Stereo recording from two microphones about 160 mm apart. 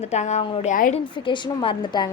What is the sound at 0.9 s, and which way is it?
A woman's voice, 30° left (ahead or behind).